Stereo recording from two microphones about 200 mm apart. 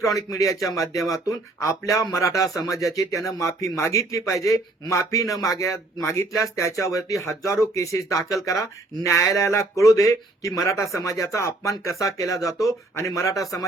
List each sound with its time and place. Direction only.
0.0 s speech: 15° left (ahead or behind)